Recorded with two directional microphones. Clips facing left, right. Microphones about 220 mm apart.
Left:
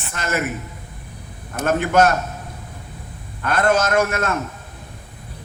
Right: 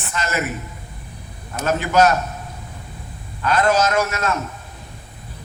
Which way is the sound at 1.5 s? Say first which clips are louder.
Left 1 dB; 55° left (ahead or behind).